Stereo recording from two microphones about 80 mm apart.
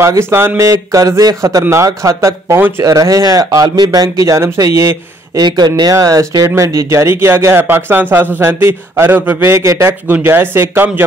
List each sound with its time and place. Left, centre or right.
0.0 s speech: right
2.8 s speech: right
5.4 s speech: right
5.9 s speech: right
10.2 s speech: right